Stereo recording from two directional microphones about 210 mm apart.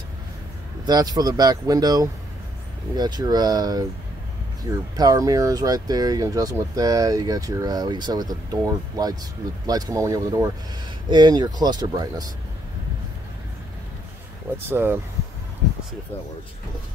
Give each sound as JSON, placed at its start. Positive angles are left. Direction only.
{"t": 0.8, "sound": "speech", "side_deg": -20}
{"t": 4.9, "sound": "speech", "side_deg": -15}
{"t": 14.7, "sound": "speech", "side_deg": -10}